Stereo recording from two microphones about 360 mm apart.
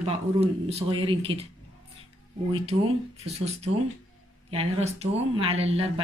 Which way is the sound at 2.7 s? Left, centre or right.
Centre.